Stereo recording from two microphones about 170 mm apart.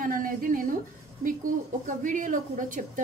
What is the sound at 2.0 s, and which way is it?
A woman's voice, 50° right (ahead or behind).